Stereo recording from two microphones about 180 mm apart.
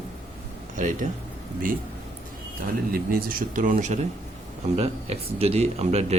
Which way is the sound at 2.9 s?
55° right (ahead or behind).